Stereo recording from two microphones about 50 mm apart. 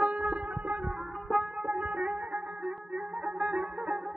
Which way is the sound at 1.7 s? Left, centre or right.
Right.